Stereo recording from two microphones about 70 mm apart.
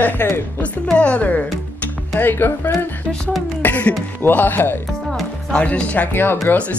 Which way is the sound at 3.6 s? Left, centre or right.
Left.